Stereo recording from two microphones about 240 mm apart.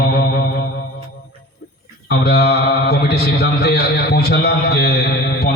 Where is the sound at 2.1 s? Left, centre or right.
Left.